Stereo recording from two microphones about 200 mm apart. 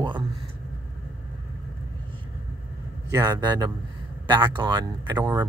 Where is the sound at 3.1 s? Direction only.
20° right (ahead or behind).